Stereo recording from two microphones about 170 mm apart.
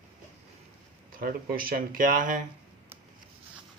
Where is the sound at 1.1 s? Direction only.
55° right (ahead or behind).